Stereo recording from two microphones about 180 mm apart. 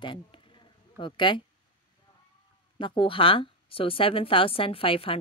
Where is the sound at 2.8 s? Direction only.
25° left (ahead or behind).